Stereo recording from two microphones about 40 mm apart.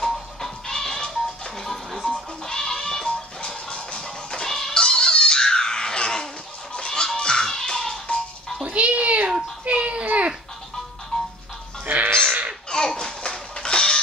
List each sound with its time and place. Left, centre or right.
0.0 s music: centre
4.5 s music: centre
4.7 s music: centre
8.6 s a sound: right
11.1 s music: centre
11.8 s music: right
12.1 s crow: right
12.6 s a sound: centre
13.6 s music: centre